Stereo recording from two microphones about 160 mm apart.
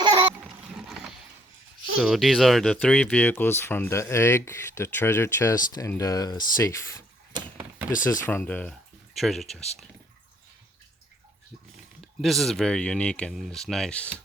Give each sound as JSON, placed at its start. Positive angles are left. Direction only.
{"t": 0.0, "sound": "a sound", "side_deg": -30}
{"t": 2.0, "sound": "speech", "side_deg": 0}
{"t": 8.2, "sound": "speech", "side_deg": 15}
{"t": 9.1, "sound": "speech", "side_deg": 0}
{"t": 12.2, "sound": "speech", "side_deg": 0}